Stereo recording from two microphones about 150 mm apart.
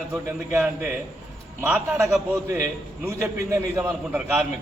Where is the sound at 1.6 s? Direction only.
10° right (ahead or behind).